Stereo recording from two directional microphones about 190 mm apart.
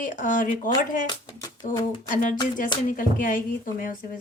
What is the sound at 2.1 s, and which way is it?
A woman's voice, 45° left (ahead or behind).